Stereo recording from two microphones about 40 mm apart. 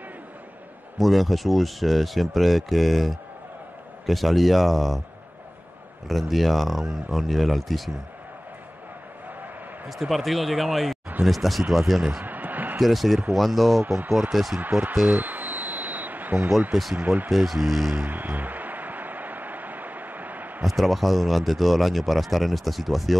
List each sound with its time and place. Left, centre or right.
0.9 s speech: centre
6.0 s speech: centre
9.8 s speech: centre
12.1 s a sound: right
12.7 s speech: centre
13.8 s speech: right
14.3 s speech: centre
14.6 s speech: right
15.0 s a sound: right
16.7 s speech: centre
17.3 s speech: centre
18.0 s a sound: right
20.6 s speech: centre